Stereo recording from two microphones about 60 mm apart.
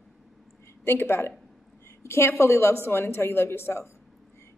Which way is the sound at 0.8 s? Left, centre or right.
Left.